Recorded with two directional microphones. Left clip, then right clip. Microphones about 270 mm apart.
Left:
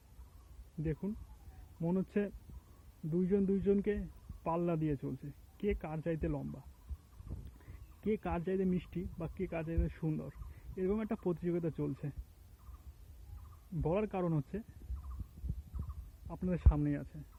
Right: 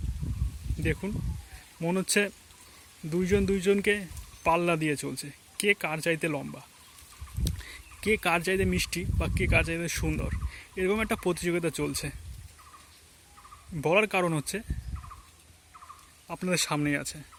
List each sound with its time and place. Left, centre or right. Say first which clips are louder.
1.8 s speech: right 10 dB; right
13.8 s speech: right 11 dB; right
16.3 s speech: right 11 dB; right